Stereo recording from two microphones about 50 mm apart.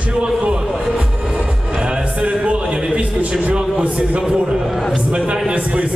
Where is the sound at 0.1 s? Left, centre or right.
Right.